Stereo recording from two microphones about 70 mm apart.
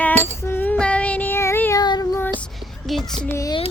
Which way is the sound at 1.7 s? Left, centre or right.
Left.